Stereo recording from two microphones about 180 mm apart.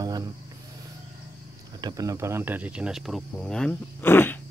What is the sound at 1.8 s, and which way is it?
Speech, 20° right (ahead or behind).